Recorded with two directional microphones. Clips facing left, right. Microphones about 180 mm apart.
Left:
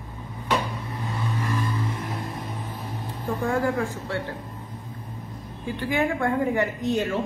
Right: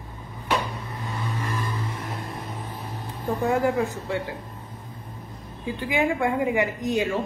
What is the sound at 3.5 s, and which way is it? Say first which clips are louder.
Speech: right 2 dB; 20° right (ahead or behind).